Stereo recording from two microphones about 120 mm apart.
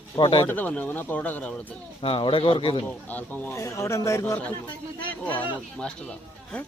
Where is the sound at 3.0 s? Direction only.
15° left (ahead or behind).